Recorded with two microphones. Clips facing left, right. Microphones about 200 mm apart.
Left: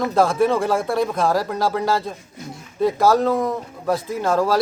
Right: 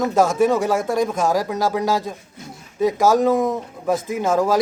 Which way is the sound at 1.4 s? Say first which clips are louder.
Right 1 dB; centre (ahead or behind).